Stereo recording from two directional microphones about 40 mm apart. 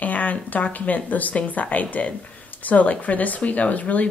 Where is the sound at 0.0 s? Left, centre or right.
Left.